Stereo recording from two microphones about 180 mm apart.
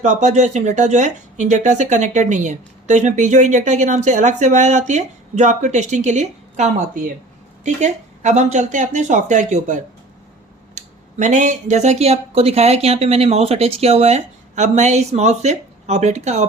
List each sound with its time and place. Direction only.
0.0 s speech: 40° right (ahead or behind)